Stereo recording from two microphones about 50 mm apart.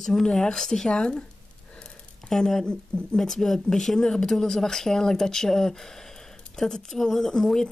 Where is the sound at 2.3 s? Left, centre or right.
Centre.